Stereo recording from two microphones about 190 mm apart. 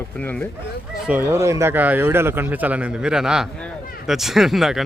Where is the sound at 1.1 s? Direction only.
15° right (ahead or behind).